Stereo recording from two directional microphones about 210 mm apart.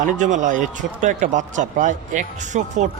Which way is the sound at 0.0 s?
35° right (ahead or behind).